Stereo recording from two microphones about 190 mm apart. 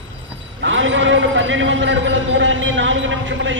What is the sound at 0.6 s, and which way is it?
A man's voice, 80° right.